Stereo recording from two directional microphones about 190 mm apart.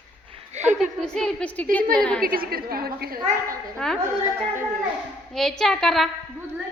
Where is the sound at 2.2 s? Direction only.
50° right (ahead or behind).